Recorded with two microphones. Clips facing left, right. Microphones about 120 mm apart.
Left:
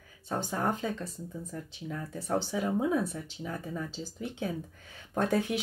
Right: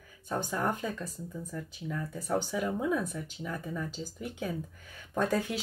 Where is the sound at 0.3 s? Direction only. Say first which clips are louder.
Even; 25° left (ahead or behind).